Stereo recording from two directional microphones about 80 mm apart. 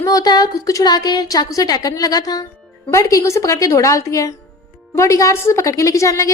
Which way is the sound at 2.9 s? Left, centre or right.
Left.